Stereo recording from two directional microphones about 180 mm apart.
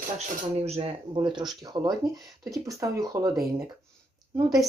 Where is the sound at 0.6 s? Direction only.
35° right (ahead or behind); by 3.3 s 15° right (ahead or behind).